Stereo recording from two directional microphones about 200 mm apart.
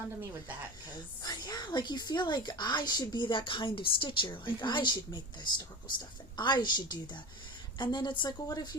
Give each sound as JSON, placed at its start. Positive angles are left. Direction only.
{"t": 1.2, "sound": "a woman's voice", "side_deg": 20}